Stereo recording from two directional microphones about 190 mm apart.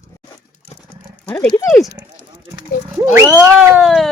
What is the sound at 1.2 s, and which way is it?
Speech, 15° left (ahead or behind).